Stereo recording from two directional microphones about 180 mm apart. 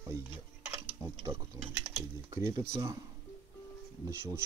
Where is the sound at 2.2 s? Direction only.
15° right (ahead or behind).